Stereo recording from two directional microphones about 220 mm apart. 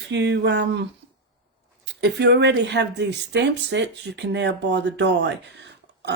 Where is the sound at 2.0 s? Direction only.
50° right (ahead or behind).